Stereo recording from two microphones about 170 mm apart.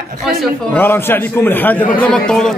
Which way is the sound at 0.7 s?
10° left (ahead or behind).